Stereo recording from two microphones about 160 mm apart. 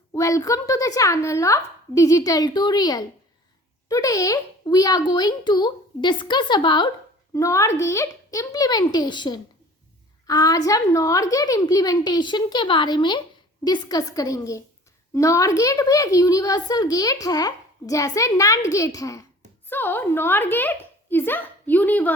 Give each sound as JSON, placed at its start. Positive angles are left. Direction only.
{"t": 0.1, "sound": "a woman's voice", "side_deg": 20}